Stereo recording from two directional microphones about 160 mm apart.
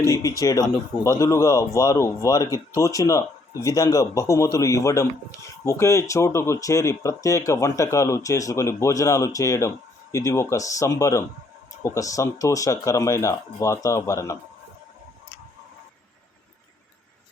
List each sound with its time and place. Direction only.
0.0 s speech: 20° left (ahead or behind)